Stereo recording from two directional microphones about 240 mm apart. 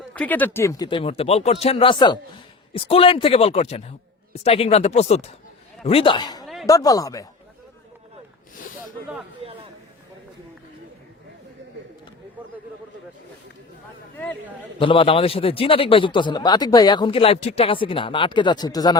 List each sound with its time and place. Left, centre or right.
0.1 s a man's voice: centre
14.8 s a man's voice: left